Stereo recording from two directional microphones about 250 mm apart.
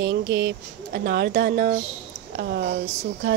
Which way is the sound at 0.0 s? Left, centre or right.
Right.